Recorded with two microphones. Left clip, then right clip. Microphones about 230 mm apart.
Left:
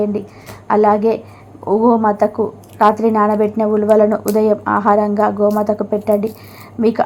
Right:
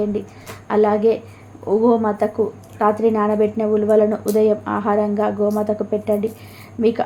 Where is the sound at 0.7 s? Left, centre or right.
Centre.